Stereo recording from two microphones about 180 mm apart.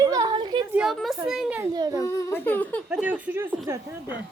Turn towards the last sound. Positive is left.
turn(degrees=-15)  # may be behind; listen again after turning